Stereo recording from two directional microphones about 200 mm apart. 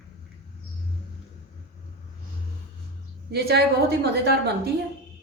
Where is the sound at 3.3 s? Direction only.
55° right (ahead or behind).